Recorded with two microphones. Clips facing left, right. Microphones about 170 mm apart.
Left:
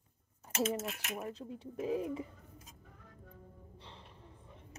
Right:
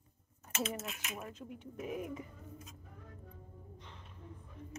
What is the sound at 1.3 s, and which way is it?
Speech, 35° left (ahead or behind).